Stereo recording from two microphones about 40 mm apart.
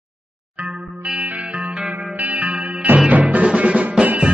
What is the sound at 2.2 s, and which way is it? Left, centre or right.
Music, right.